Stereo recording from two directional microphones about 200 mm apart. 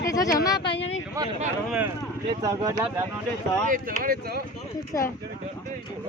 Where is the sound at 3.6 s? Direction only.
40° right (ahead or behind).